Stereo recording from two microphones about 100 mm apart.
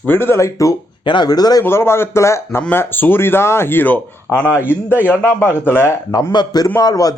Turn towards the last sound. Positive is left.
turn(degrees=40)  # may be behind; listen again after turning